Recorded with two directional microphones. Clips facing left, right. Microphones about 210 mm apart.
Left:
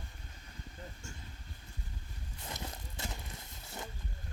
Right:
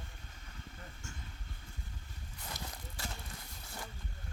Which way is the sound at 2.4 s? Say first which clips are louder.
Left 2 dB; 20° left (ahead or behind).